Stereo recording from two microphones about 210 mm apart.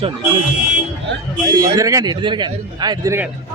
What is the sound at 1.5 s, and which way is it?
Speech, 15° right (ahead or behind).